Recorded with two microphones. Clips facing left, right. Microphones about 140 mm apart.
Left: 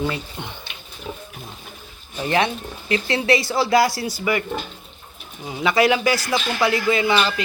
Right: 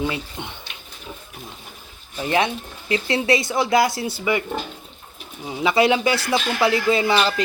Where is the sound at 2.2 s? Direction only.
20° right (ahead or behind).